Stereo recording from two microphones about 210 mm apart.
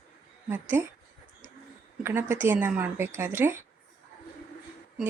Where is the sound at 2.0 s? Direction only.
10° right (ahead or behind).